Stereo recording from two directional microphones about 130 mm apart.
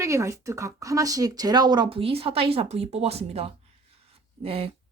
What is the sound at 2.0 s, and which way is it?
Speech, 45° right (ahead or behind).